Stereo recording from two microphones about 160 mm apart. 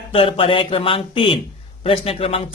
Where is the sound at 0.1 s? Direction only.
35° left (ahead or behind).